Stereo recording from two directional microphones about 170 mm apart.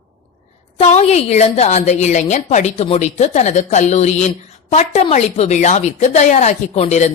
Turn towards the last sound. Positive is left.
turn(degrees=40)  # may be behind; listen again after turning